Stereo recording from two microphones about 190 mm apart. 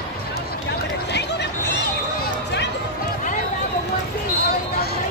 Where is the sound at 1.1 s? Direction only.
65° left (ahead or behind).